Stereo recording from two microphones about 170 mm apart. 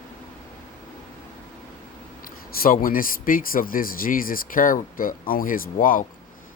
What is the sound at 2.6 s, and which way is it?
Speech, 55° left (ahead or behind).